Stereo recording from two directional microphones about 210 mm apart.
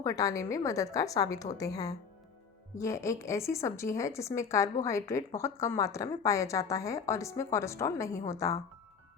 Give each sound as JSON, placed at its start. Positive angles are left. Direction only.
{"t": 0.0, "sound": "a woman's voice", "side_deg": 15}